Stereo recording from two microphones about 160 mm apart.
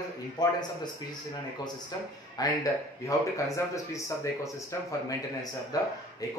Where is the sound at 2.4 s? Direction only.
20° left (ahead or behind).